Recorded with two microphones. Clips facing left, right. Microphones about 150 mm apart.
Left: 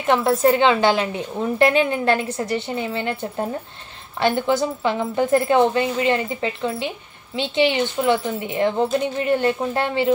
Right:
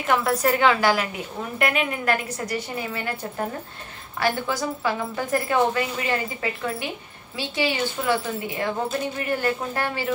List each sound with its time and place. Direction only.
0.0 s a woman's voice: 25° left (ahead or behind)